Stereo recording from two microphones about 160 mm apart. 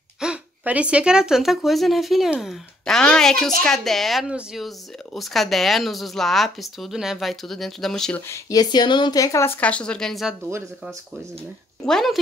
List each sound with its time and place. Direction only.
0.2 s a woman's voice: 5° right (ahead or behind)
8.3 s speech: 25° left (ahead or behind)
9.6 s a woman's voice: 10° left (ahead or behind)
11.8 s a woman's voice: centre (ahead or behind)